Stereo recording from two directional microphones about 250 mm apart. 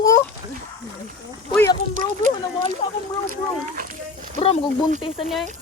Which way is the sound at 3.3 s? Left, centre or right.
Right.